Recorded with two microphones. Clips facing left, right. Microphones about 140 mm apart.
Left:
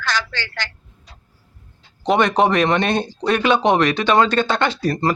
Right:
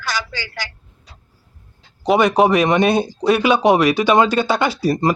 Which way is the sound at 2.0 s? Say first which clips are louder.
Right 2 dB; 5° right (ahead or behind).